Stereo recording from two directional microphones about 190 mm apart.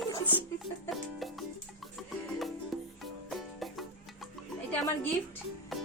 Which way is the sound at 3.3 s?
Centre (ahead or behind).